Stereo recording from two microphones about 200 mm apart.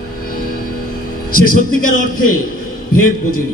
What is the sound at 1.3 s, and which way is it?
Speech, 45° left (ahead or behind).